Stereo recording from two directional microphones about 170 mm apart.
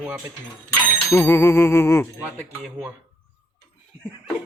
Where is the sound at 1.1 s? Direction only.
15° left (ahead or behind).